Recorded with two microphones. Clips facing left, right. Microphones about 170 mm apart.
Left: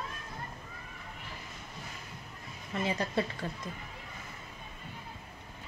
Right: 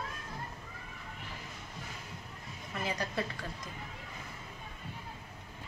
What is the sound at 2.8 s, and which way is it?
Speech, 25° left (ahead or behind).